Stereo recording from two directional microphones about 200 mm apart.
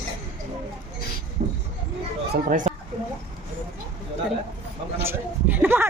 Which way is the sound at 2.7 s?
35° right (ahead or behind).